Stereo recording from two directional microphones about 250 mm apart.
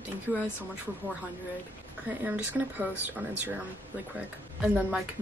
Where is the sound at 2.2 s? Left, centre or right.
Centre.